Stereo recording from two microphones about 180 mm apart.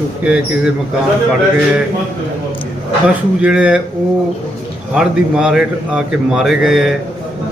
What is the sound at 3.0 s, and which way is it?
Speech, 5° right (ahead or behind).